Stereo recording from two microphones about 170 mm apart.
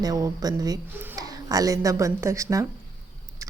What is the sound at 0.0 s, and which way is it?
A woman's voice, 20° right (ahead or behind).